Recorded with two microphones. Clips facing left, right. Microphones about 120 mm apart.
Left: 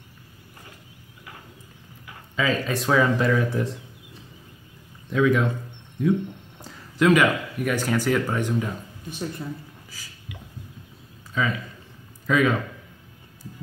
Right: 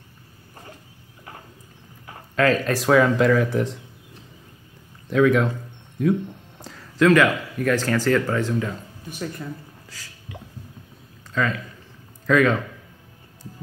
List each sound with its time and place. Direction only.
2.3 s speech: centre (ahead or behind)
5.1 s speech: centre (ahead or behind); by 9.4 s 25° left (ahead or behind)
11.3 s speech: 5° left (ahead or behind)